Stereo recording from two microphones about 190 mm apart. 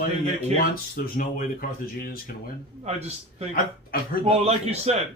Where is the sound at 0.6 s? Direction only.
50° left (ahead or behind).